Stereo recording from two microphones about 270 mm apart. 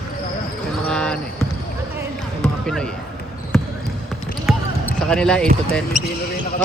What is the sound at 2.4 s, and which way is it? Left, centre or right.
Basketball bounce, centre.